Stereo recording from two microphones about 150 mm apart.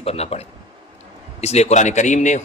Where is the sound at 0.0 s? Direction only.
45° left (ahead or behind).